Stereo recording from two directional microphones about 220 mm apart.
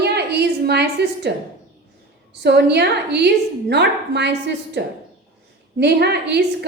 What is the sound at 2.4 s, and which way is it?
A woman's voice, 50° right (ahead or behind).